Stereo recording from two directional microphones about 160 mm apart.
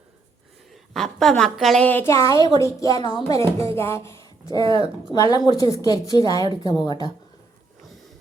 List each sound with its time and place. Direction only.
0.7 s a woman's voice: 5° left (ahead or behind)
4.6 s speech: 30° right (ahead or behind)
5.1 s a woman's voice: 25° left (ahead or behind)